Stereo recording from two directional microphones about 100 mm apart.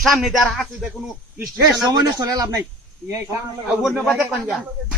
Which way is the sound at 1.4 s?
35° right (ahead or behind).